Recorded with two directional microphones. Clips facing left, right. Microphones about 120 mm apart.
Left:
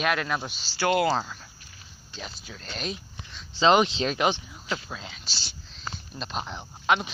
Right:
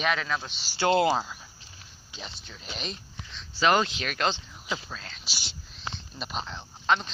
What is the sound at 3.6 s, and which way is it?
Speech, 20° left (ahead or behind).